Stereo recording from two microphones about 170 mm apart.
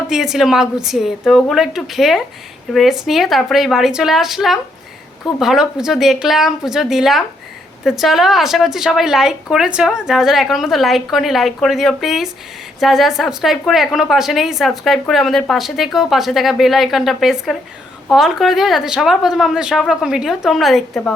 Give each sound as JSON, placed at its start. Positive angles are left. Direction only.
{"t": 0.1, "sound": "a woman's voice", "side_deg": 0}